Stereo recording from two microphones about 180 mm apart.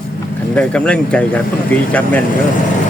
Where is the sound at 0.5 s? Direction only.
5° left (ahead or behind).